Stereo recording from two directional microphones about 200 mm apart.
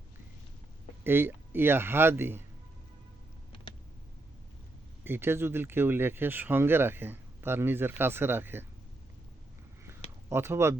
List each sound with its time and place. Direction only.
1.0 s speech: 10° right (ahead or behind)
3.5 s computer keyboard: 25° left (ahead or behind)
5.0 s speech: 10° right (ahead or behind)
10.2 s speech: 10° right (ahead or behind)